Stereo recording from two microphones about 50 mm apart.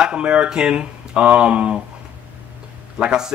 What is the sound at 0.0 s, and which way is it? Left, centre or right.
Speech, centre.